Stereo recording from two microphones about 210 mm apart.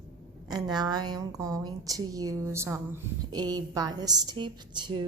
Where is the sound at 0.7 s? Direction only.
20° right (ahead or behind).